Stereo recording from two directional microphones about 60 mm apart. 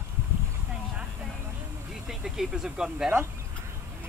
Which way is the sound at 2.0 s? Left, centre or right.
Centre.